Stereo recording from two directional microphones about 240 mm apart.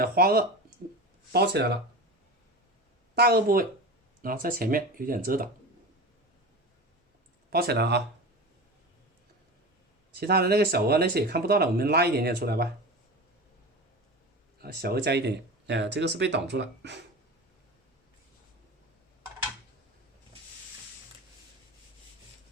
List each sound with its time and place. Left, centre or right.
0.0 s speech: right
3.2 s speech: right
7.5 s speech: right
10.2 s speech: right
14.6 s speech: right